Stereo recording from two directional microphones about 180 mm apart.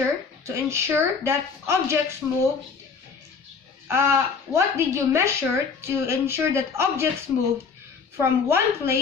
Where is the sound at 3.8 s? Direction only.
15° right (ahead or behind).